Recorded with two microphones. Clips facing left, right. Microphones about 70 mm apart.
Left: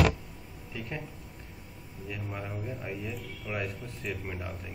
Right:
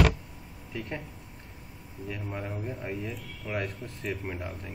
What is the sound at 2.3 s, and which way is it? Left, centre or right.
Speech, centre.